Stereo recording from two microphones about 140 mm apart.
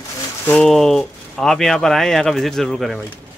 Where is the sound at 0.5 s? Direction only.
5° left (ahead or behind).